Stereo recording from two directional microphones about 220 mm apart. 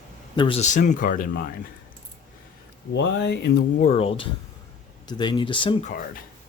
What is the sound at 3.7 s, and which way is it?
Speech, 30° left (ahead or behind).